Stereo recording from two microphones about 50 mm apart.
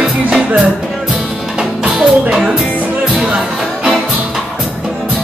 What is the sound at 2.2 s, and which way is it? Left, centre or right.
Speech, centre.